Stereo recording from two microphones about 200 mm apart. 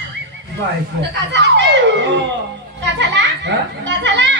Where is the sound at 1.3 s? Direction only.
60° right (ahead or behind).